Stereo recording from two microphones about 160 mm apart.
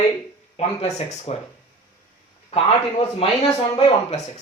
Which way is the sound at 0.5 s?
40° left (ahead or behind).